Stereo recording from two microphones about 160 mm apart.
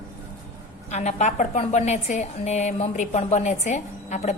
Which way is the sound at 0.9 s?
45° left (ahead or behind).